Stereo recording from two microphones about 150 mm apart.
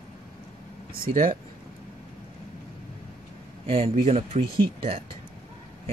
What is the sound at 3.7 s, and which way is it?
Speech, 40° right (ahead or behind).